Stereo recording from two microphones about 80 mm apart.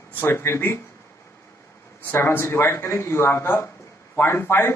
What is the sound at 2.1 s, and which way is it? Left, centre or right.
Speech, left.